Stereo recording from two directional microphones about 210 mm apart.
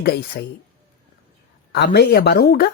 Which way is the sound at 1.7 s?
50° left (ahead or behind).